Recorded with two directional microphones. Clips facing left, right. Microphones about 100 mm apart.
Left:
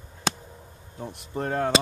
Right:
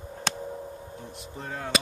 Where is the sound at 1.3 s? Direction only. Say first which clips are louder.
Left 10 dB; 60° left (ahead or behind).